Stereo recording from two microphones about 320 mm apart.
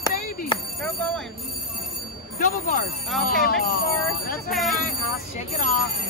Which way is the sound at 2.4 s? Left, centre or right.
Left.